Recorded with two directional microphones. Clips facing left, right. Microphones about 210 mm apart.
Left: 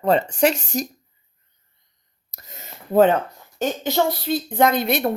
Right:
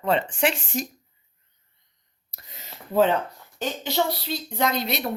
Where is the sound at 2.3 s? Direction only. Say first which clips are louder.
Left 3 dB; 45° left (ahead or behind).